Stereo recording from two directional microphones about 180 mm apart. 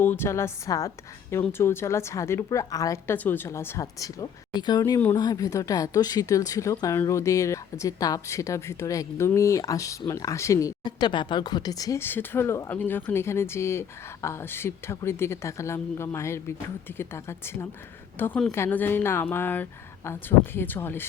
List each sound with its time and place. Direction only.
0.0 s speech: 10° left (ahead or behind)